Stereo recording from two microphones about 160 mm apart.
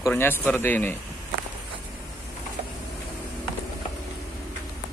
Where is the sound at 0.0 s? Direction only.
15° left (ahead or behind).